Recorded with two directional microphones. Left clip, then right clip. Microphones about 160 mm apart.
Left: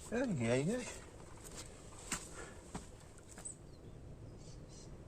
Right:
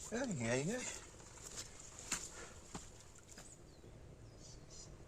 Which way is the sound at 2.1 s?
20° left (ahead or behind).